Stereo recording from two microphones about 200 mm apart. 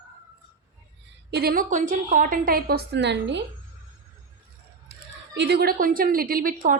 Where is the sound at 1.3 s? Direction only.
50° right (ahead or behind).